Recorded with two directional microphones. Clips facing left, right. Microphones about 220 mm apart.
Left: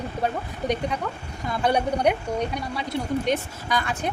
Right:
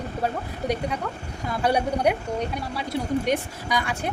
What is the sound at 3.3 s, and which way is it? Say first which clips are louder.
Speech: even; 15° right (ahead or behind).